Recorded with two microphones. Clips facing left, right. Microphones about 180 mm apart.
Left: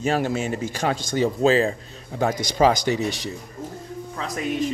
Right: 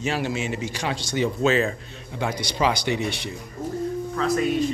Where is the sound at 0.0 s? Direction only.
45° left (ahead or behind).